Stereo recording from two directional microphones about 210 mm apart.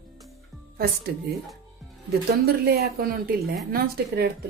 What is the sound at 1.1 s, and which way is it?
Speech, 50° right (ahead or behind).